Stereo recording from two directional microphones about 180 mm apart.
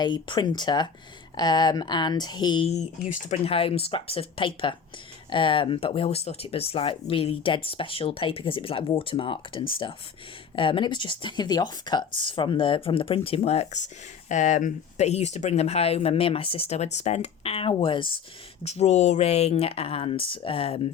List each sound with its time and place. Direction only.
0.0 s speech: 25° left (ahead or behind)